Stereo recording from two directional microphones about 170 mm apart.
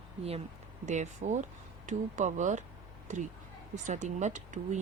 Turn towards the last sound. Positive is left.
turn(degrees=-45)  # may be behind; listen again after turning